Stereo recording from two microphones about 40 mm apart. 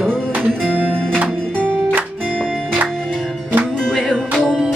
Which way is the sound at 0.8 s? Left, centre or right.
Right.